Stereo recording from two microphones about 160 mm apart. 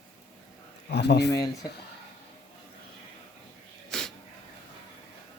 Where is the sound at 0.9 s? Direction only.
90° left.